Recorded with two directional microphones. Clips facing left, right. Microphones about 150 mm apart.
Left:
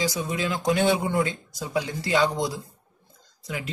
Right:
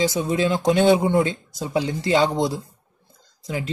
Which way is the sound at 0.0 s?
25° right (ahead or behind).